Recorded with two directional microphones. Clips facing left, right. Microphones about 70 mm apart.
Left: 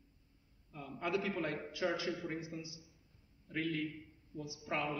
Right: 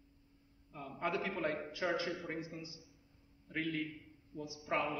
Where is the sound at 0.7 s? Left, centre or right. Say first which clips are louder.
Even; right.